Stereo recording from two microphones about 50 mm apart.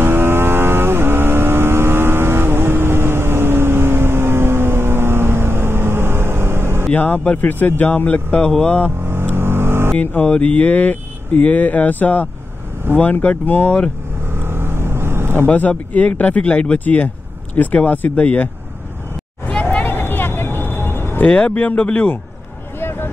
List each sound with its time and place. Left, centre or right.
0.0 s vehicle: right
6.9 s speech: left
8.5 s hum: centre
9.0 s vehicle: right
10.2 s speech: left
14.3 s vehicle: right
15.9 s speech: left
19.4 s vehicle: left
21.2 s speech: left
22.8 s a sound: left